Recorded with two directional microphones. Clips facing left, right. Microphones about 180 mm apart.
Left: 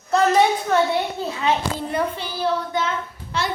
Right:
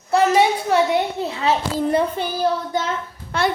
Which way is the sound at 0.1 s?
10° right (ahead or behind).